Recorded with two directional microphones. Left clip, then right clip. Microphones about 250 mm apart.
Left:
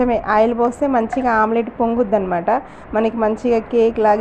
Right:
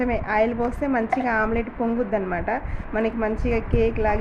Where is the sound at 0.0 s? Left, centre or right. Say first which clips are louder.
Left 7 dB; centre.